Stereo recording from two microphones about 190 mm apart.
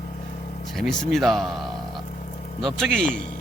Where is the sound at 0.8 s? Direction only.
Centre (ahead or behind).